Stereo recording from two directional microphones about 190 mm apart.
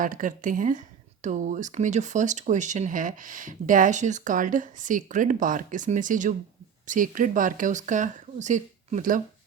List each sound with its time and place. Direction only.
0.0 s speech: 45° right (ahead or behind)